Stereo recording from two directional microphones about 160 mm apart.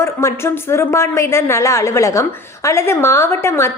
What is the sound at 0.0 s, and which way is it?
A woman's voice, 15° left (ahead or behind).